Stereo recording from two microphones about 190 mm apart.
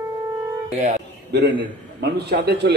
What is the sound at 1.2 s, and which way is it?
A man's voice, 60° right (ahead or behind).